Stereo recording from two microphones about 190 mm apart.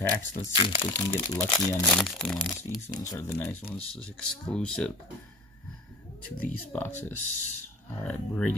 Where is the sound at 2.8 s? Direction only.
20° left (ahead or behind).